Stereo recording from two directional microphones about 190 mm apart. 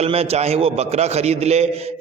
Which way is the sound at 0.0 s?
30° right (ahead or behind).